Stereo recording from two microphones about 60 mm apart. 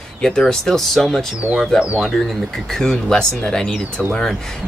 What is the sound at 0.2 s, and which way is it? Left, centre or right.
A man's voice, centre.